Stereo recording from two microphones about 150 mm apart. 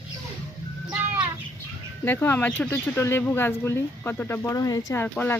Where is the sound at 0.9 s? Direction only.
10° right (ahead or behind).